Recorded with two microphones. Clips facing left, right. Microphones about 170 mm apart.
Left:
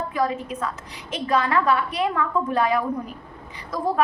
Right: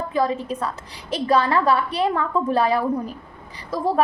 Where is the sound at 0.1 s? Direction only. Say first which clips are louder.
Right 3 dB; 30° right (ahead or behind).